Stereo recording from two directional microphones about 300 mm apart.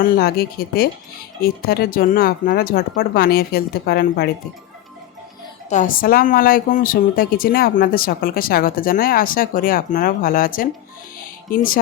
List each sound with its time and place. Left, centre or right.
0.0 s speech: left
5.6 s speech: left